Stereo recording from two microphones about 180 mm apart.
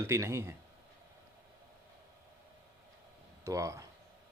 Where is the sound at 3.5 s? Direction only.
15° right (ahead or behind).